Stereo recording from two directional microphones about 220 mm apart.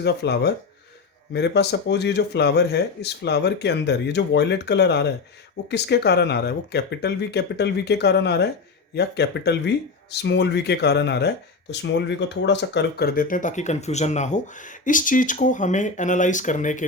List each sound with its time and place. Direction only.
0.0 s speech: 50° left (ahead or behind)